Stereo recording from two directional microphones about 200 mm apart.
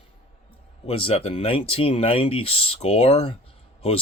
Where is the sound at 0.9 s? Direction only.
30° left (ahead or behind).